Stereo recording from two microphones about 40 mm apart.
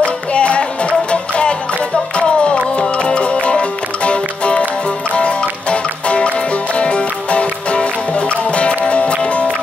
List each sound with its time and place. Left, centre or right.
0.0 s music: left